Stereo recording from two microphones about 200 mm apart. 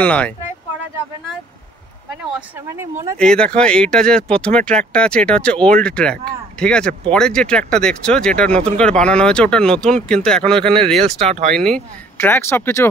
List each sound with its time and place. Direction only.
0.0 s speech: 5° left (ahead or behind)
2.3 s speech: 10° right (ahead or behind)
3.2 s speech: 5° left (ahead or behind)
11.2 s speech: 35° right (ahead or behind)
11.5 s speech: 5° left (ahead or behind)